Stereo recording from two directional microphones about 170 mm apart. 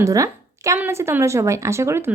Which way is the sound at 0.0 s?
20° right (ahead or behind).